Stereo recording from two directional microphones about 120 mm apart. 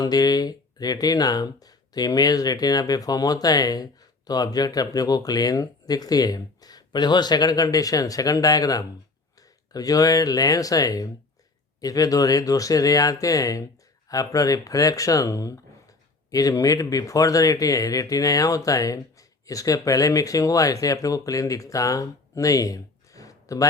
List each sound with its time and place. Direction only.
0.0 s speech: 35° left (ahead or behind)